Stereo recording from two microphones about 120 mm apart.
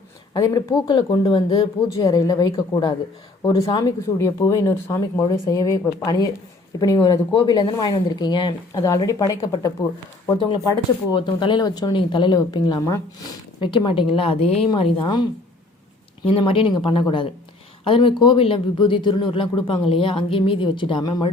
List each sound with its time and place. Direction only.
0.3 s speech: 30° left (ahead or behind)
4.0 s speech: 25° left (ahead or behind); by 8.8 s 40° left (ahead or behind)
9.0 s speech: 30° left (ahead or behind)
11.1 s speech: 40° left (ahead or behind)
14.7 s speech: 45° left (ahead or behind)
16.4 s speech: 45° left (ahead or behind)